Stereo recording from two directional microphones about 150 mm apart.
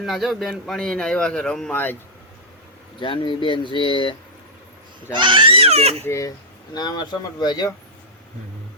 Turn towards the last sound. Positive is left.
turn(degrees=30)  # may be behind; listen again after turning